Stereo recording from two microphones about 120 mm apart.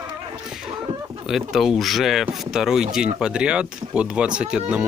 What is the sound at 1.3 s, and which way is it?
Speech, centre (ahead or behind).